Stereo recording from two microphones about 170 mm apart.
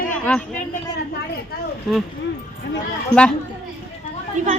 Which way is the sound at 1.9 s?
Centre (ahead or behind).